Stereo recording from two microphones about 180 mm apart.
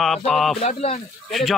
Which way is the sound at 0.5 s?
35° left (ahead or behind).